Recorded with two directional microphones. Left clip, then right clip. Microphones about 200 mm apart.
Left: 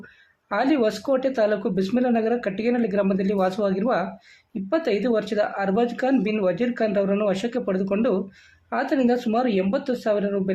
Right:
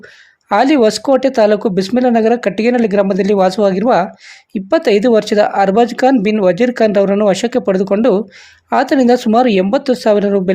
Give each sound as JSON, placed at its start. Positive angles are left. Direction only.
{"t": 0.5, "sound": "speech", "side_deg": -35}